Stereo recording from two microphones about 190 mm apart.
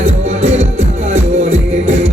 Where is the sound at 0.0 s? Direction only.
35° right (ahead or behind).